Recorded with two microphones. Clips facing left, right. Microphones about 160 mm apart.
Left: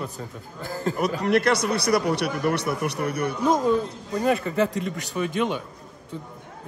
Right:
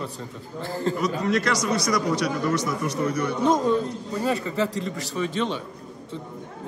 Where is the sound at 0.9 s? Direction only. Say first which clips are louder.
Left 4 dB; 60° left (ahead or behind).